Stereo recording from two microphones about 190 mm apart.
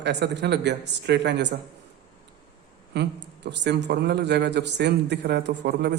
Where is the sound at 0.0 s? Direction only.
65° right (ahead or behind).